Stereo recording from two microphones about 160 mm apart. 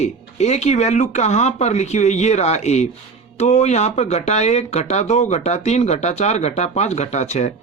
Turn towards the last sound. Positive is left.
turn(degrees=45)  # may be behind; listen again after turning